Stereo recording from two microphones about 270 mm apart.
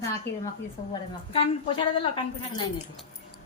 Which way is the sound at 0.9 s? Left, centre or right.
Centre.